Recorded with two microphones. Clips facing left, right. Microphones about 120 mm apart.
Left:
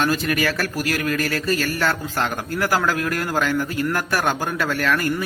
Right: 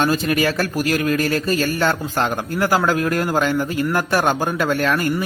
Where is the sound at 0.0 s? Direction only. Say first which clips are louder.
Right 3 dB; 20° right (ahead or behind).